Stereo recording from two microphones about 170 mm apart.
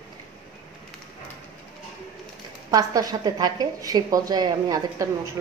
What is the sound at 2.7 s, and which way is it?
A woman's voice, 20° right (ahead or behind).